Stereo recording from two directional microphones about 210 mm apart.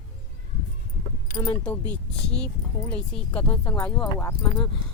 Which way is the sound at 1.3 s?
20° left (ahead or behind).